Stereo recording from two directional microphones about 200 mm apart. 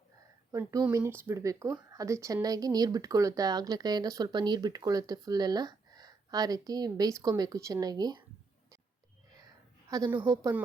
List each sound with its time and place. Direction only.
0.5 s speech: 15° right (ahead or behind)
9.9 s speech: 15° right (ahead or behind)